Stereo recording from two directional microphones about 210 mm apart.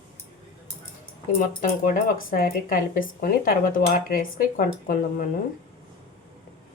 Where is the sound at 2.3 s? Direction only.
45° left (ahead or behind).